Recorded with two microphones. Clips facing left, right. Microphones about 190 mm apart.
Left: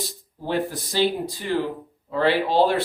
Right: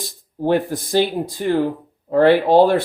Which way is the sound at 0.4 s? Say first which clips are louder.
Right 7 dB; 50° right (ahead or behind).